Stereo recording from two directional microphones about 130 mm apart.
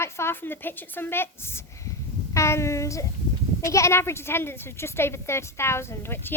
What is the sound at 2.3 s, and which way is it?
Child singing, 20° left (ahead or behind).